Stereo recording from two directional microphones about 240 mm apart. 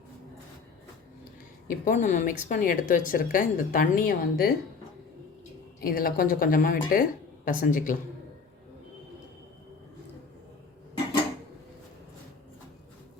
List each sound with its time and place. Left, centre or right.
1.6 s speech: left
5.8 s speech: left